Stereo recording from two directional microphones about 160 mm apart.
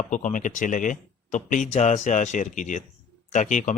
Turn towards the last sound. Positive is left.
turn(degrees=50)  # may be behind; listen again after turning